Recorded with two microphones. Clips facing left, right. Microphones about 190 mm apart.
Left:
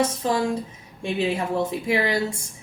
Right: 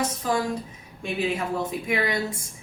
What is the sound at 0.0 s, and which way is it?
Speech, 30° left (ahead or behind).